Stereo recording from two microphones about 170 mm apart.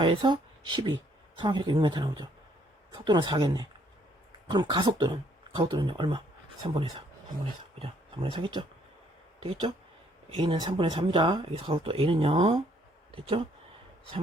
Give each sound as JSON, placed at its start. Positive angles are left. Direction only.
{"t": 0.0, "sound": "speech", "side_deg": -30}
{"t": 7.8, "sound": "speech", "side_deg": -30}